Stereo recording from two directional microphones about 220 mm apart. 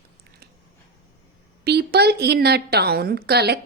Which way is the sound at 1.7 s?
45° right (ahead or behind).